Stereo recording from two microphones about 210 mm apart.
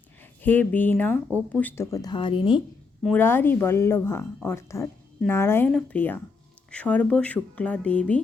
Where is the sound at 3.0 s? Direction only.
10° left (ahead or behind).